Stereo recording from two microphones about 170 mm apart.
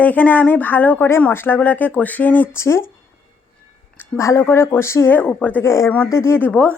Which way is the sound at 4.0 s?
15° left (ahead or behind).